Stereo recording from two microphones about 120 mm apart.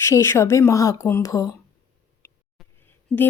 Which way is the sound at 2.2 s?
20° left (ahead or behind).